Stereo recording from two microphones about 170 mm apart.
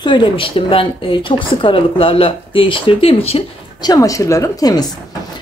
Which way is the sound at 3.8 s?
20° left (ahead or behind).